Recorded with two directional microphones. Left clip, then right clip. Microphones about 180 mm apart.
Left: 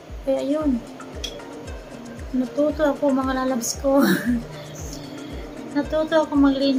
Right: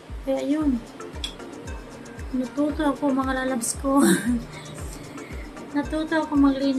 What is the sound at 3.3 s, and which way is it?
Speech, 15° right (ahead or behind).